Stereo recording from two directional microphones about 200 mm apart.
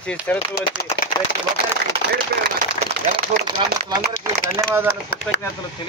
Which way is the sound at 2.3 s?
50° right (ahead or behind).